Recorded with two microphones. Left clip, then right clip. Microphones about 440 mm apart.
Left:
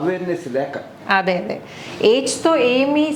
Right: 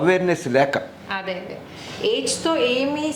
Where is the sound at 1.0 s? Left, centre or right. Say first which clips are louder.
Left 10 dB; left.